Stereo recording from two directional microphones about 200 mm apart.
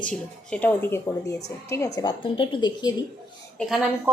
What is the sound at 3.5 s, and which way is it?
Speech, centre (ahead or behind).